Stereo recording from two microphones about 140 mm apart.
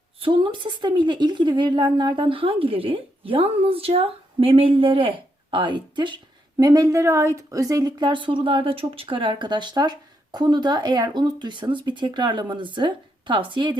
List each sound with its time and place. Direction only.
0.2 s a woman's voice: 35° right (ahead or behind)